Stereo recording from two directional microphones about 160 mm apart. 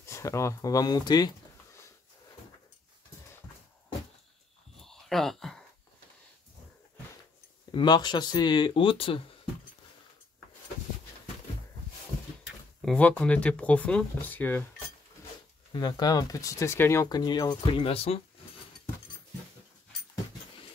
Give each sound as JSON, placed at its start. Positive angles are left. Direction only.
{"t": 0.0, "sound": "speech", "side_deg": 15}
{"t": 4.8, "sound": "a sound", "side_deg": 0}
{"t": 7.7, "sound": "speech", "side_deg": 25}
{"t": 12.8, "sound": "speech", "side_deg": 10}
{"t": 15.7, "sound": "speech", "side_deg": 25}